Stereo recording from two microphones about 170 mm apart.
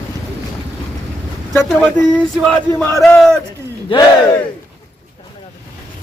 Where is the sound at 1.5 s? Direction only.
15° left (ahead or behind).